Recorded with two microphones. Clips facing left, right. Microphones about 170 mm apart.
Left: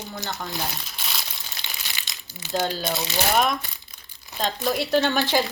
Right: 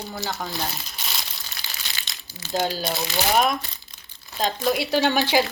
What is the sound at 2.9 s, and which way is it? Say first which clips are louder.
Speech: right 1 dB; 5° right (ahead or behind).